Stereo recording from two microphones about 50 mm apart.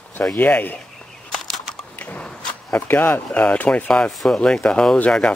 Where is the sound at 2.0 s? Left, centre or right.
Left.